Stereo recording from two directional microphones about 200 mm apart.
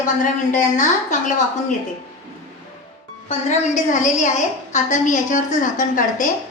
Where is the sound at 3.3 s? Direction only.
35° left (ahead or behind).